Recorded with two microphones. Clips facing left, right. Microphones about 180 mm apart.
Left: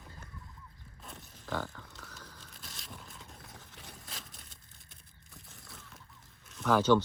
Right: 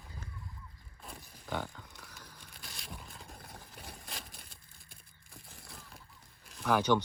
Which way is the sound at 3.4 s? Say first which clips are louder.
Right 2 dB; 60° right (ahead or behind).